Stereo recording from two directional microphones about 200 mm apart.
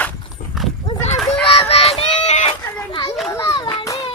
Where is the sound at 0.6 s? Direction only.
Centre (ahead or behind).